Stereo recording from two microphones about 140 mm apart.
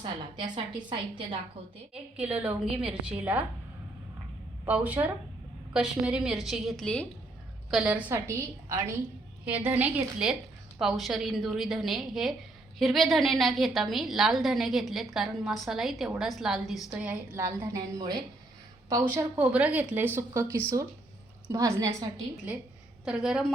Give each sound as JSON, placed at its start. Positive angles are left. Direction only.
{"t": 0.0, "sound": "a woman's voice", "side_deg": -35}
{"t": 1.9, "sound": "a woman's voice", "side_deg": -10}
{"t": 4.6, "sound": "a woman's voice", "side_deg": -10}
{"t": 7.7, "sound": "a woman's voice", "side_deg": -5}
{"t": 8.1, "sound": "a woman's voice", "side_deg": -20}
{"t": 17.4, "sound": "a woman's voice", "side_deg": -20}
{"t": 19.0, "sound": "a woman's voice", "side_deg": -10}
{"t": 20.1, "sound": "a woman's voice", "side_deg": -20}
{"t": 23.0, "sound": "a woman's voice", "side_deg": -5}